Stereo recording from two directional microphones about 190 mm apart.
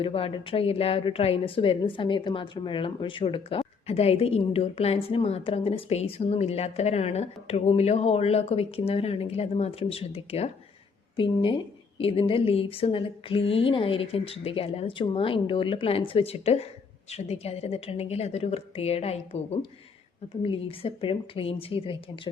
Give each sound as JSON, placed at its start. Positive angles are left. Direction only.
{"t": 0.0, "sound": "a woman's voice", "side_deg": 30}